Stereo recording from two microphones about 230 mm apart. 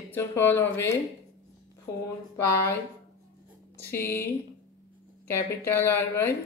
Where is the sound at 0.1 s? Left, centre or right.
Centre.